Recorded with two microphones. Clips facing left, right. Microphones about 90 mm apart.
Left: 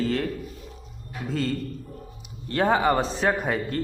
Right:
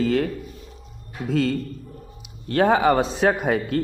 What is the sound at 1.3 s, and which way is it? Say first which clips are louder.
A man's voice: right 5 dB; 65° right (ahead or behind).